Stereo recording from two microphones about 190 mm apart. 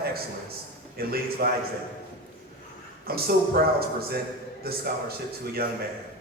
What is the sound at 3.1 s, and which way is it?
A man's voice, 55° right (ahead or behind).